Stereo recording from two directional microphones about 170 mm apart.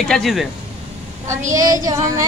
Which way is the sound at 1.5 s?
20° right (ahead or behind).